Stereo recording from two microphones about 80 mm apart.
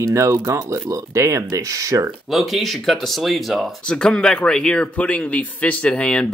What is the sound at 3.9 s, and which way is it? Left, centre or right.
Speech, centre.